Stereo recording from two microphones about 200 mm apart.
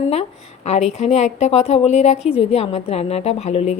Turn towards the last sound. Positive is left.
turn(degrees=30)  # may be behind; listen again after turning